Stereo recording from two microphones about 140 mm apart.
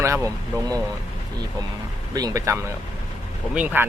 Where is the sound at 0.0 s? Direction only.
20° right (ahead or behind).